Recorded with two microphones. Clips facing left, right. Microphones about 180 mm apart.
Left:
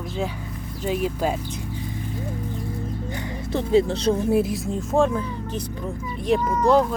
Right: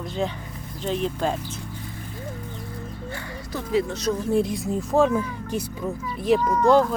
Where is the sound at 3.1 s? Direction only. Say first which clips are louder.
Left 7 dB; 25° left (ahead or behind).